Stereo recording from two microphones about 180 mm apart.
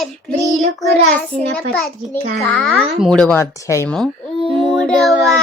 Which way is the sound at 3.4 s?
15° left (ahead or behind).